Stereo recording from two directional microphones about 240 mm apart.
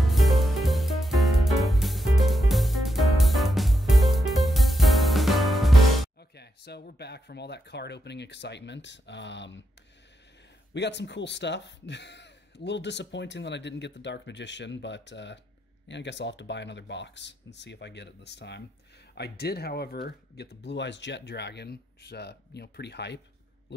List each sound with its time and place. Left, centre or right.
0.0 s music: centre
6.3 s speech: left
10.7 s speech: left